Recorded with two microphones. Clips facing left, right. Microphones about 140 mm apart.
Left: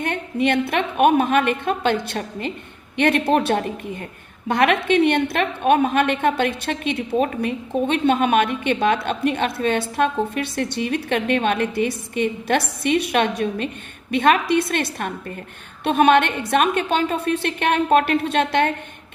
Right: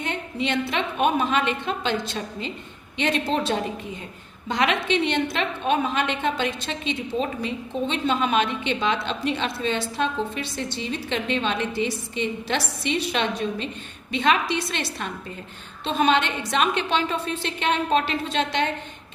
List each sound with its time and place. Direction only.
0.0 s a woman's voice: 55° left (ahead or behind)